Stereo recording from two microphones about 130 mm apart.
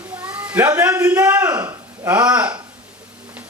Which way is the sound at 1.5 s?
25° right (ahead or behind).